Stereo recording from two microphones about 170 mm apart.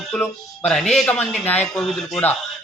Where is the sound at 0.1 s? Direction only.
5° left (ahead or behind).